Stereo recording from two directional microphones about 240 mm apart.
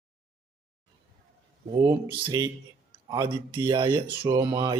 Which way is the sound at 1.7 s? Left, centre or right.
Centre.